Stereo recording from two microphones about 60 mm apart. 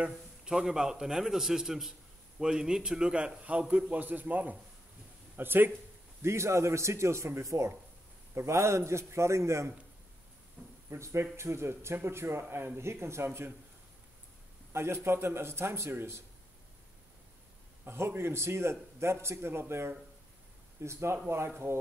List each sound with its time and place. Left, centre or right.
0.5 s a man's voice: centre; by 5.7 s right
6.2 s speech: right
10.9 s speech: right
14.7 s speech: right
17.8 s speech: right
20.8 s speech: right